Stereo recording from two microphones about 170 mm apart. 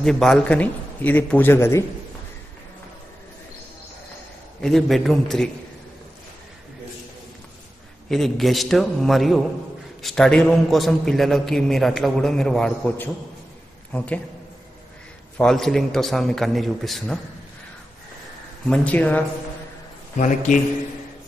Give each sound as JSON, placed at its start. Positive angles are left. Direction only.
{"t": 0.0, "sound": "a man's voice", "side_deg": 5}
{"t": 4.6, "sound": "a man's voice", "side_deg": 0}
{"t": 8.1, "sound": "a man's voice", "side_deg": 0}
{"t": 15.3, "sound": "a man's voice", "side_deg": 5}
{"t": 18.7, "sound": "a man's voice", "side_deg": 10}
{"t": 20.2, "sound": "a man's voice", "side_deg": 45}